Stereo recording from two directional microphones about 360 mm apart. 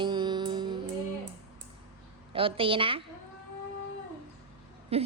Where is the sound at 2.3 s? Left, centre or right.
Centre.